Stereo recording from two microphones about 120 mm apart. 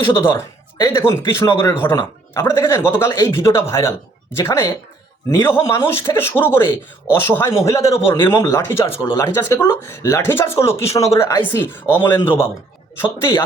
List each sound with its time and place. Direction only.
0.0 s speech: 20° left (ahead or behind)